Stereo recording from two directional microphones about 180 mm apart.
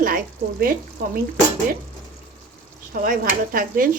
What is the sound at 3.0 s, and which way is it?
Speech, 50° right (ahead or behind).